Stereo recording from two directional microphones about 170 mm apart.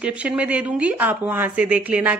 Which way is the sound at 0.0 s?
10° right (ahead or behind).